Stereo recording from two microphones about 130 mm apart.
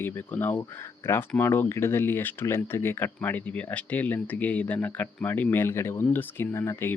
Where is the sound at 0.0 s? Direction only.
15° left (ahead or behind).